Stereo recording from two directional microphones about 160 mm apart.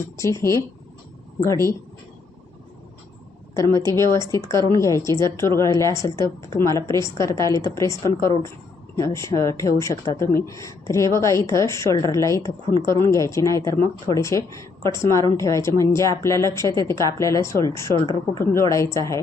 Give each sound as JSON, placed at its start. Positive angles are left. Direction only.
{"t": 0.2, "sound": "a woman's voice", "side_deg": 20}
{"t": 3.6, "sound": "a woman's voice", "side_deg": 20}